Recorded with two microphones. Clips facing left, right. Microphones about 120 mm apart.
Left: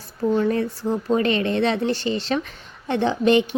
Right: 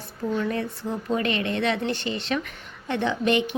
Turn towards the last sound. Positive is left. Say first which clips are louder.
# left 5 dB
turn(degrees=30)  # may be behind; listen again after turning